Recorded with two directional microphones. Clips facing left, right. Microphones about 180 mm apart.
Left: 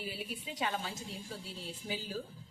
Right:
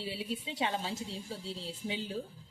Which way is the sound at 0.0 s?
25° right (ahead or behind).